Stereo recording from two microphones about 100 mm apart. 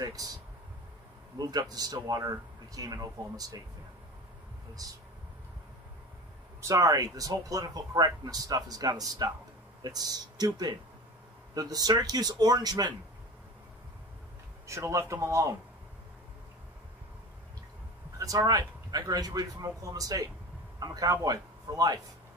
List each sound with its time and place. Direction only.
0.0 s speech: 35° right (ahead or behind)
1.4 s speech: 40° right (ahead or behind)
4.8 s speech: 40° right (ahead or behind)
6.6 s speech: 30° right (ahead or behind)
14.7 s speech: 30° right (ahead or behind)
18.2 s speech: 35° right (ahead or behind)